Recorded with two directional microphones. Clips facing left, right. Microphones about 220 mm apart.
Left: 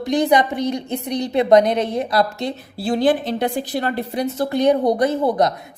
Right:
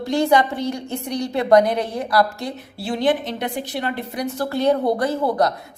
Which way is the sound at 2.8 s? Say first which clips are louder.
Left 3 dB; 35° left (ahead or behind).